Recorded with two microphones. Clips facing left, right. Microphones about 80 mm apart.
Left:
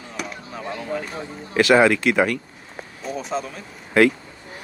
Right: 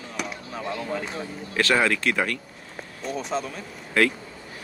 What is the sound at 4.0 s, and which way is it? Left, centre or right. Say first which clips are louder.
Speech: left 6 dB; centre.